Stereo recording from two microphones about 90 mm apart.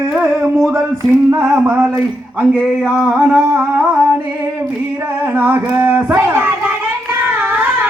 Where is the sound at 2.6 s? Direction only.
10° right (ahead or behind).